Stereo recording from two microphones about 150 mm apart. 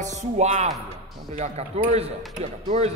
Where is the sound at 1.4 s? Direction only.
50° right (ahead or behind).